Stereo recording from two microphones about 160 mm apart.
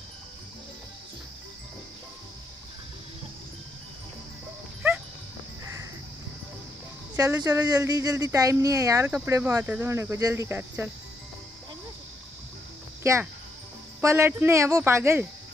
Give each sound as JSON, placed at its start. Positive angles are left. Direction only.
{"t": 7.4, "sound": "speech", "side_deg": -25}
{"t": 13.0, "sound": "speech", "side_deg": -20}